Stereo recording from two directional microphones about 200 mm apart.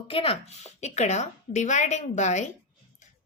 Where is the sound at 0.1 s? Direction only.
30° left (ahead or behind).